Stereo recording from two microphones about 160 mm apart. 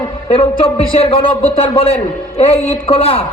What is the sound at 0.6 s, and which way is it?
A man's voice, 35° left (ahead or behind).